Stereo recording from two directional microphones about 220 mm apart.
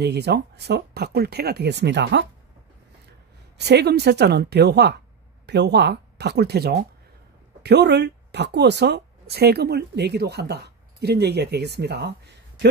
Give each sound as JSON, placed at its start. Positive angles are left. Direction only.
{"t": 0.0, "sound": "a woman's voice", "side_deg": -50}
{"t": 3.5, "sound": "a woman's voice", "side_deg": -50}